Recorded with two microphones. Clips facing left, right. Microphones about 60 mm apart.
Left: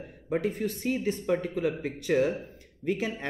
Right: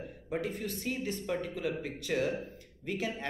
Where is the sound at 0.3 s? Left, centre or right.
Left.